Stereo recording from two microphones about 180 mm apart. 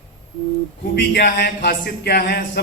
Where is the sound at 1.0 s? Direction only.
65° left (ahead or behind).